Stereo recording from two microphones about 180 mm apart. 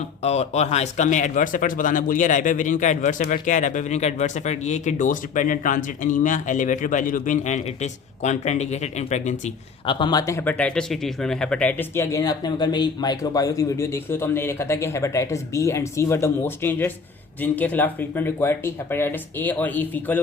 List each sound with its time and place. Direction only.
0.2 s speech: 35° left (ahead or behind)
9.8 s speech: 25° left (ahead or behind); by 20.1 s 10° left (ahead or behind)